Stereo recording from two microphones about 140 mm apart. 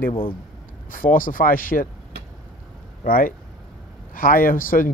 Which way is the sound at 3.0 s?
80° left.